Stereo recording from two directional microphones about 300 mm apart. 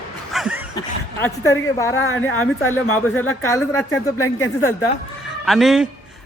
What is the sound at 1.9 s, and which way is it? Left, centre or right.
Speech, left.